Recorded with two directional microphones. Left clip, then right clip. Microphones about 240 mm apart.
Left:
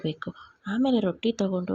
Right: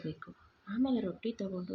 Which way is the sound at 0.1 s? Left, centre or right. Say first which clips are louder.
Left 11 dB; left.